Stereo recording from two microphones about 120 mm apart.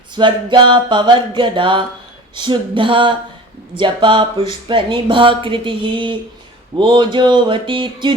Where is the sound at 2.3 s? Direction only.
40° right (ahead or behind).